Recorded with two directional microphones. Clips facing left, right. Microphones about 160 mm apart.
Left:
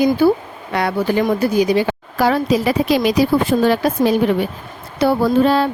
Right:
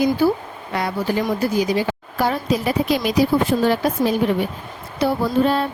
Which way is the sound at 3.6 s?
80° left.